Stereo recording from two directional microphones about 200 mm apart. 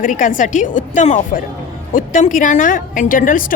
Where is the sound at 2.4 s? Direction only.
40° left (ahead or behind).